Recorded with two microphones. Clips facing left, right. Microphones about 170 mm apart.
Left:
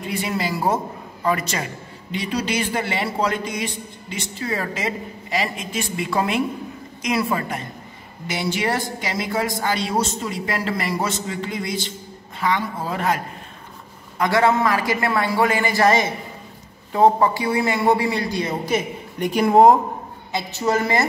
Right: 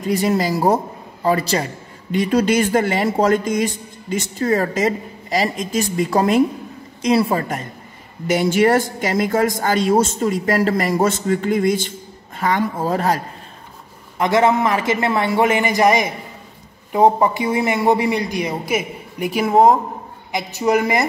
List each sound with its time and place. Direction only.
0.0 s speech: 40° right (ahead or behind)
2.1 s a man's voice: 50° right (ahead or behind); by 7.4 s 30° right (ahead or behind)
8.3 s a man's voice: 45° right (ahead or behind)
14.1 s a man's voice: 20° right (ahead or behind); by 19.8 s centre (ahead or behind)
20.3 s a man's voice: 15° right (ahead or behind)